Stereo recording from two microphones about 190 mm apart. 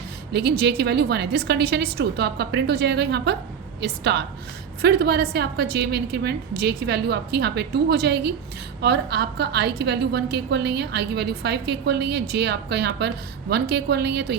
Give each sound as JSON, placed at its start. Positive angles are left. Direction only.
{"t": 0.3, "sound": "a woman's voice", "side_deg": -55}